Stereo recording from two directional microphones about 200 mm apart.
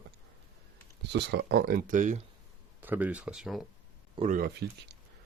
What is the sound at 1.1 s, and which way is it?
Speech, 55° right (ahead or behind).